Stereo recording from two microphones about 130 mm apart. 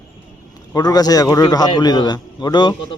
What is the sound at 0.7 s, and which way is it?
A man's voice, 30° left (ahead or behind).